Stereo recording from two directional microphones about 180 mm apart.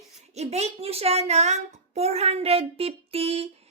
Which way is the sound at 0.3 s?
35° right (ahead or behind).